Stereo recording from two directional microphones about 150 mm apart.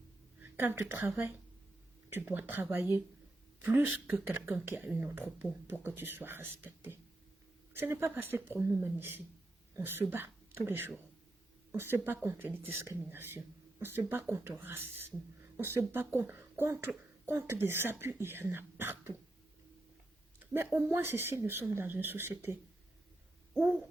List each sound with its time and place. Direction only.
0.5 s speech: 15° right (ahead or behind)
2.1 s a woman's voice: 10° right (ahead or behind)
12.0 s speech: 15° right (ahead or behind)
20.5 s speech: 15° right (ahead or behind)